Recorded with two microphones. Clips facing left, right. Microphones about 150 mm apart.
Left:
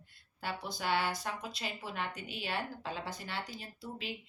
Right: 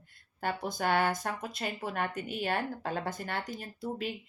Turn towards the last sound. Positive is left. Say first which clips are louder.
# right 8 dB
turn(degrees=-50)  # may be behind; listen again after turning